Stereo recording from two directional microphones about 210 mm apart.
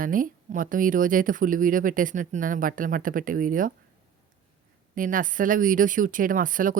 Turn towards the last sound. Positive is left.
turn(degrees=-40)  # may be behind; listen again after turning